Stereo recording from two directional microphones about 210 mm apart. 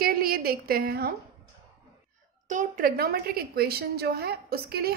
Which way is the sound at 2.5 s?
40° right (ahead or behind).